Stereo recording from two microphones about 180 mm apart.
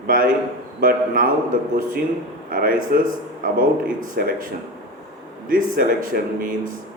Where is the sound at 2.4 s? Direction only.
55° right (ahead or behind).